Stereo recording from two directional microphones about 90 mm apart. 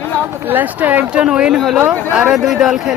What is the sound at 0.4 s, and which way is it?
Speech, 20° right (ahead or behind).